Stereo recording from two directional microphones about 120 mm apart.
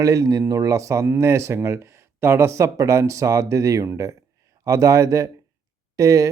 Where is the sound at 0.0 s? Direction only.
25° right (ahead or behind).